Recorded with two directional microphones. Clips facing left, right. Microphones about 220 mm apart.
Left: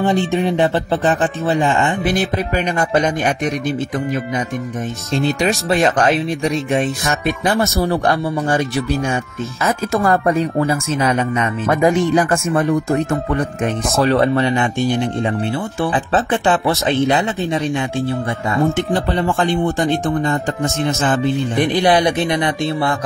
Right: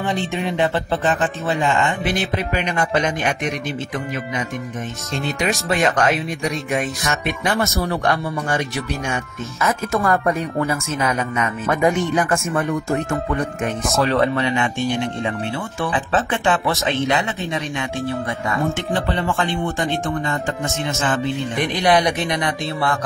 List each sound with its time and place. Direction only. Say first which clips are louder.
0.0 s speech: left 6 dB; 35° left (ahead or behind)
5.1 s speech: left 5 dB; 30° left (ahead or behind)
15.8 s speech: left 3 dB; 35° left (ahead or behind)
18.9 s speech: left 4 dB; 40° left (ahead or behind)